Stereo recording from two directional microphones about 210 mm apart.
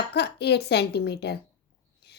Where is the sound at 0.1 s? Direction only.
50° left (ahead or behind).